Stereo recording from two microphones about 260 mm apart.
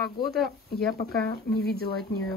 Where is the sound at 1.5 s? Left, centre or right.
Left.